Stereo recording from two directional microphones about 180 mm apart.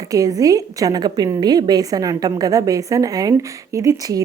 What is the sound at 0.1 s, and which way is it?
A woman's voice, 20° right (ahead or behind).